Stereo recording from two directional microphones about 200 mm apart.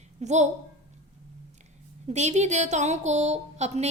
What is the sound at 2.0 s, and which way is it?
A woman's voice, 35° right (ahead or behind).